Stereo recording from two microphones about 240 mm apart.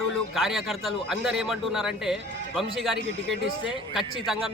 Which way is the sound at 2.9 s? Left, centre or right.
Right.